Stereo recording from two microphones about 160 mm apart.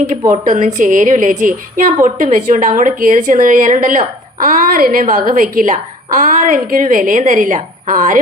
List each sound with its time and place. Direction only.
0.3 s a woman's voice: 50° right (ahead or behind)